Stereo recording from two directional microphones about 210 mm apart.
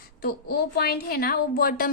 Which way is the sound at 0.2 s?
45° left (ahead or behind).